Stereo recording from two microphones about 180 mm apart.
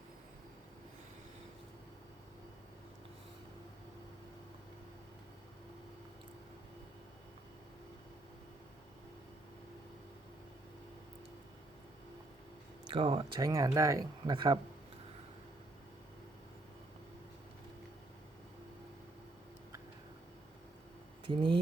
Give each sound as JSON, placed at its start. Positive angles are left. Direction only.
{"t": 12.9, "sound": "speech", "side_deg": -30}
{"t": 21.2, "sound": "speech", "side_deg": -25}